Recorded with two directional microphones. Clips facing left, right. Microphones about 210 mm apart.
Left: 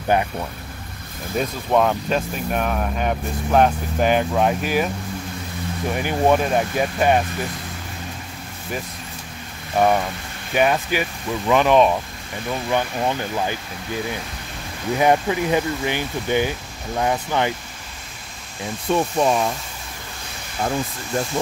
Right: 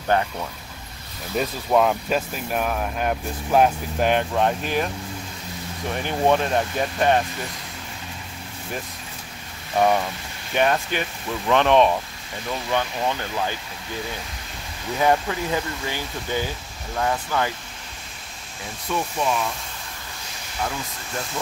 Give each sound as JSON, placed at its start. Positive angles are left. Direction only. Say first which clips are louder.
{"t": 0.1, "sound": "speech", "louder": "left 1 dB", "side_deg": 15}
{"t": 1.3, "sound": "speech", "louder": "left 1 dB", "side_deg": 0}
{"t": 5.9, "sound": "speech", "louder": "left 2 dB", "side_deg": 10}
{"t": 9.8, "sound": "speech", "louder": "left 2 dB", "side_deg": 5}
{"t": 15.0, "sound": "speech", "louder": "left 3 dB", "side_deg": 15}
{"t": 18.9, "sound": "speech", "louder": "left 6 dB", "side_deg": 35}